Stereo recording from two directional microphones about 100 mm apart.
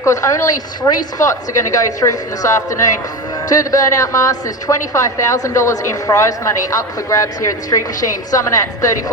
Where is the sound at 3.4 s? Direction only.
35° left (ahead or behind).